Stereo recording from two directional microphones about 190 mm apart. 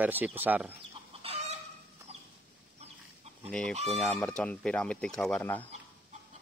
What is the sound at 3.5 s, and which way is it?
Speech, 5° left (ahead or behind).